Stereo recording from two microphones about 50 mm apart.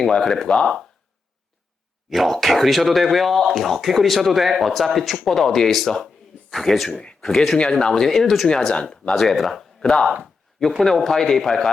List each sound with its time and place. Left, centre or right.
0.0 s speech: centre
2.0 s speech: centre
6.9 s speech: left
7.2 s speech: centre
8.4 s speech: centre
9.1 s speech: centre
9.8 s speech: centre
10.6 s speech: centre